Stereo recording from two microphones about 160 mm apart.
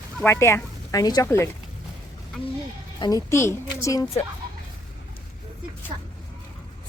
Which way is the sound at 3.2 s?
15° left (ahead or behind).